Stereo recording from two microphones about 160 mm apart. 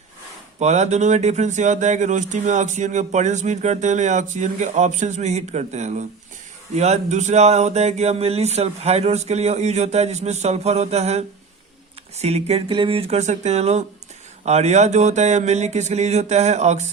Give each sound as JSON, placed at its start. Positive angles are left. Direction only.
{"t": 0.6, "sound": "speech", "side_deg": -45}